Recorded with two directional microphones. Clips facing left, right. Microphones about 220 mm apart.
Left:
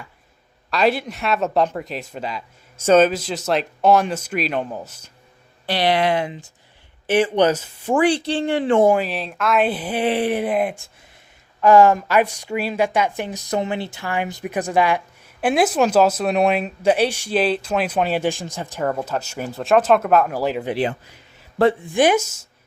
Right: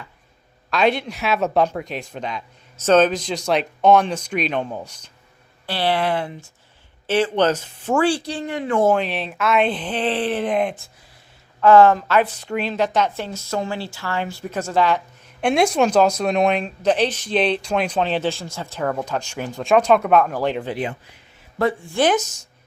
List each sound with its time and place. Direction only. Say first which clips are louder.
0.7 s speech: even; centre (ahead or behind)
5.6 s speech: left 2 dB; 15° left (ahead or behind)
8.8 s speech: even; 10° left (ahead or behind)
9.0 s speech: even; centre (ahead or behind)
21.6 s speech: left 4 dB; 25° left (ahead or behind)
21.9 s speech: left 2 dB; 10° left (ahead or behind)